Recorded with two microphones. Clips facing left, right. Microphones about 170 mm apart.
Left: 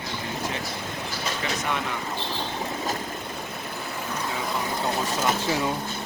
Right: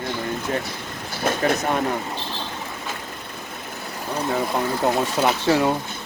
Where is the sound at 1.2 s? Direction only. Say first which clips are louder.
Right 10 dB; 50° right (ahead or behind).